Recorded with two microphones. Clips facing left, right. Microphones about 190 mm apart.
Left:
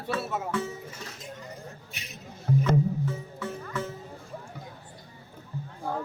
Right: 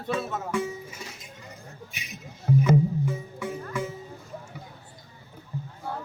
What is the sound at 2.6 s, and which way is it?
Music, 10° right (ahead or behind).